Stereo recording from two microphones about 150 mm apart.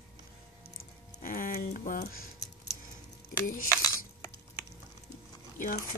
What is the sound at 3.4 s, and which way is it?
Speech, 70° left (ahead or behind).